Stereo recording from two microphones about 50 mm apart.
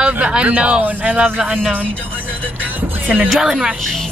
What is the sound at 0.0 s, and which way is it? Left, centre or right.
Speech, centre.